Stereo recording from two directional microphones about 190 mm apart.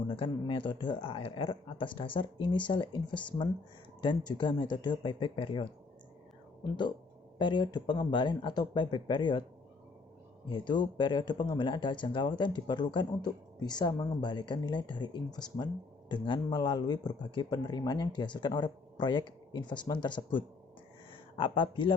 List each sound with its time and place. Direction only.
0.1 s speech: 30° left (ahead or behind)
7.3 s speech: 25° left (ahead or behind)
10.5 s speech: 25° left (ahead or behind)